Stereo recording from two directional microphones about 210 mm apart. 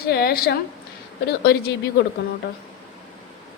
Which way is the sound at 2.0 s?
50° left (ahead or behind).